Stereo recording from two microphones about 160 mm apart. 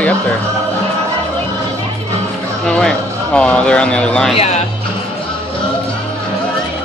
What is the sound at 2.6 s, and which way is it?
Speech, 5° left (ahead or behind).